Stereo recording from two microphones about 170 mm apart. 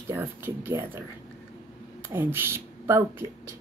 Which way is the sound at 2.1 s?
15° right (ahead or behind).